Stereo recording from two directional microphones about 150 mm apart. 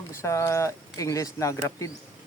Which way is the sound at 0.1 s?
20° left (ahead or behind).